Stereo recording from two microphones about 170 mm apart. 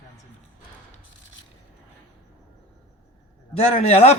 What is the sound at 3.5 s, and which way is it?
Speech, 35° left (ahead or behind).